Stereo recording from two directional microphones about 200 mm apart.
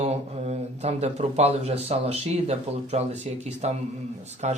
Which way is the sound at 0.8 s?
35° right (ahead or behind).